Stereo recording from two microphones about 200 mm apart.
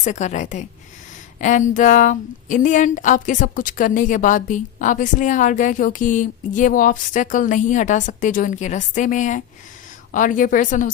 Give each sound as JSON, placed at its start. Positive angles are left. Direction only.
{"t": 0.0, "sound": "a woman's voice", "side_deg": 35}